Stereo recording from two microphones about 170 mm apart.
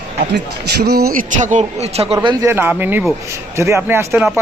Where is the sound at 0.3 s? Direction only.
75° right (ahead or behind).